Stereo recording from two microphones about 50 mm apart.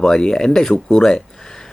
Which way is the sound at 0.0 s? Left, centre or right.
Centre.